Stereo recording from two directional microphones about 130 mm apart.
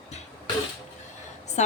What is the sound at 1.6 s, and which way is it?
Speech, 65° left (ahead or behind).